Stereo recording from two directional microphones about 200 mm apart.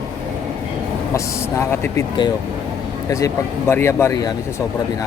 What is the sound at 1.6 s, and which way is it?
Speech, 10° left (ahead or behind).